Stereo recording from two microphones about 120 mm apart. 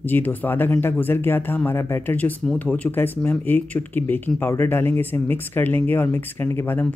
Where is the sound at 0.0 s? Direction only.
15° left (ahead or behind).